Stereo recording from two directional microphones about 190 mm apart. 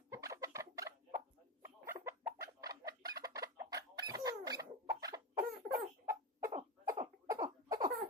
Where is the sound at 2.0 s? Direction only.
15° right (ahead or behind).